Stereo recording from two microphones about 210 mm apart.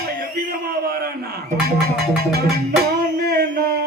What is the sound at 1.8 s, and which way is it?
Music, 45° right (ahead or behind).